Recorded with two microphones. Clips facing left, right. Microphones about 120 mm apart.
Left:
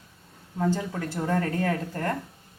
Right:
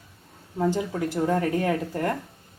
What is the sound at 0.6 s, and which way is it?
Speech, 15° right (ahead or behind).